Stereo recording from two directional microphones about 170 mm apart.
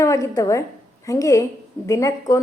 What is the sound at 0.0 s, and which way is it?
A woman's voice, 20° left (ahead or behind).